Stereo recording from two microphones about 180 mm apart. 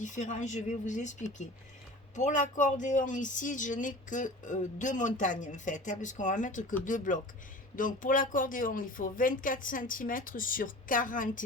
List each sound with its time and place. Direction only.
0.0 s a woman's voice: 45° left (ahead or behind)